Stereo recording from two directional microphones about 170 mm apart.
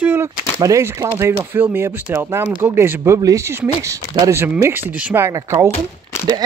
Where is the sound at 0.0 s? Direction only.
15° right (ahead or behind).